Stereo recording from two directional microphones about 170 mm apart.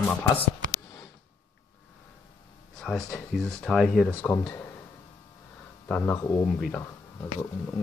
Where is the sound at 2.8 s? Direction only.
Centre (ahead or behind).